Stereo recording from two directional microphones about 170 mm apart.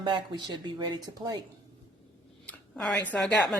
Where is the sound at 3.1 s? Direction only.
5° left (ahead or behind).